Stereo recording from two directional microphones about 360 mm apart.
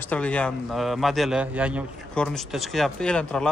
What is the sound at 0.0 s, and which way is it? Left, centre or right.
A man's voice, centre.